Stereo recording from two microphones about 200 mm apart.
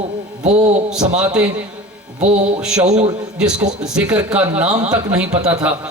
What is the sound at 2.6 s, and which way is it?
A man's voice, 5° right (ahead or behind).